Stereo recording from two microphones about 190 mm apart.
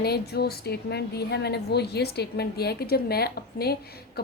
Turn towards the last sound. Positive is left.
turn(degrees=55)  # may be behind; listen again after turning